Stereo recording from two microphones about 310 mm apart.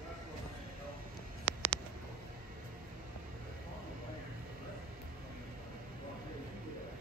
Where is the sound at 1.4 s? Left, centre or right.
Left.